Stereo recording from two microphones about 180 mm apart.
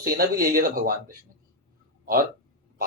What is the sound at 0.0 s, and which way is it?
Speech, 55° right (ahead or behind).